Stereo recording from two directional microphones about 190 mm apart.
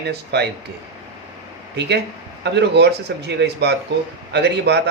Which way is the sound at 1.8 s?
60° right (ahead or behind).